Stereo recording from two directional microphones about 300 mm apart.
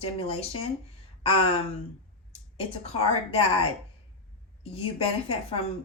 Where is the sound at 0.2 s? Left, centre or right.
Centre.